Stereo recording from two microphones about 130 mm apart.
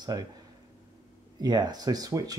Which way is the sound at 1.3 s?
30° right (ahead or behind).